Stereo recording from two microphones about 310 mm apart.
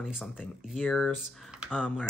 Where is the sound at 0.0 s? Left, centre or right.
Centre.